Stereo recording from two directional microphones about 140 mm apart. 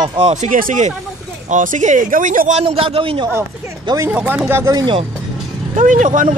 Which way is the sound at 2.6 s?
45° right (ahead or behind).